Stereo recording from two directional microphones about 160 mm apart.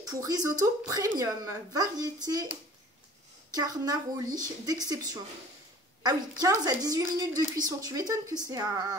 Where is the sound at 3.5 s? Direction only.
25° right (ahead or behind).